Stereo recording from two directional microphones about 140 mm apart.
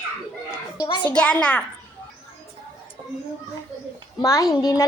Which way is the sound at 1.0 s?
10° left (ahead or behind).